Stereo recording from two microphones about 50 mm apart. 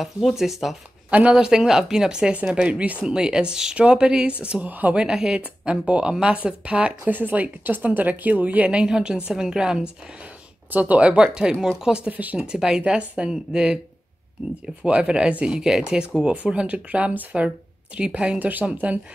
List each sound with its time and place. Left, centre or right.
0.0 s speech: centre
1.3 s speech: centre
3.1 s speech: centre; by 4.9 s right
4.9 s speech: centre
7.1 s speech: right; by 9.8 s centre
10.7 s speech: right
11.2 s speech: centre
12.1 s speech: right
12.5 s speech: centre
14.8 s speech: right
18.4 s speech: right